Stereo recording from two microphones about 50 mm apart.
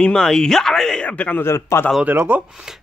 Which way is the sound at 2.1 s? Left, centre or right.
Right.